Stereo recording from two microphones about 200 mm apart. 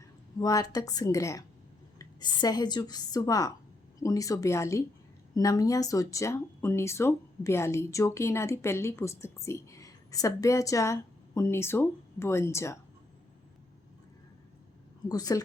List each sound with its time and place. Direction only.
0.3 s a woman's voice: 20° left (ahead or behind)
15.1 s a woman's voice: 20° left (ahead or behind)